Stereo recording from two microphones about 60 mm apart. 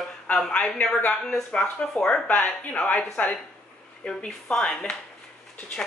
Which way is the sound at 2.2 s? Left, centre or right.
Left.